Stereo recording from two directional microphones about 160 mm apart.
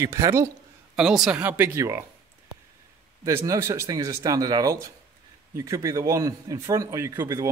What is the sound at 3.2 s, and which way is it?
A man's voice, 20° right (ahead or behind).